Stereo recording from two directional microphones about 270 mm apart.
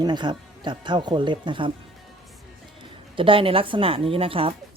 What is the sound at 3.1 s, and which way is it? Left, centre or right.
A woman's voice, centre.